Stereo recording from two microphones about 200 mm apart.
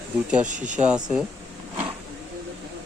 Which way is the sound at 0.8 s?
5° right (ahead or behind).